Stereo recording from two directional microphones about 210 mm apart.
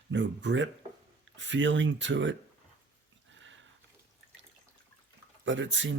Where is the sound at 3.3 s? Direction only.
60° right (ahead or behind).